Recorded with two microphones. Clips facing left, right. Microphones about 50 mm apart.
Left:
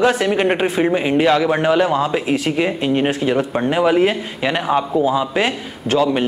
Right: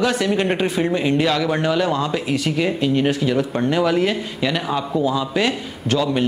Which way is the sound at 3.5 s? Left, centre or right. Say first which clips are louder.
Left 4 dB; centre.